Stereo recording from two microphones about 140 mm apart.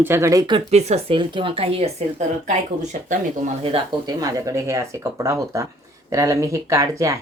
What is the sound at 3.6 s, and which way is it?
Speech, 40° right (ahead or behind).